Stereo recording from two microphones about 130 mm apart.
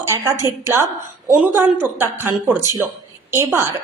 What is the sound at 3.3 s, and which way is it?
Speech, 20° right (ahead or behind).